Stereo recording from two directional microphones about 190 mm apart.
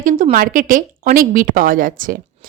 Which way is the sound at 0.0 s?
45° right (ahead or behind).